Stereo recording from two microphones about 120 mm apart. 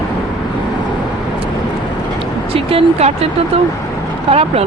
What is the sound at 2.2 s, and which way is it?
Vehicle, 50° right (ahead or behind).